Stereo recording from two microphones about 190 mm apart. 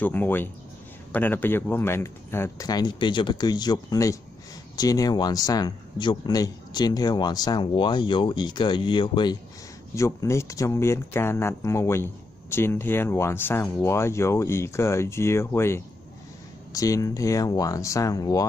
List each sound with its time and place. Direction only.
0.0 s speech: 10° left (ahead or behind)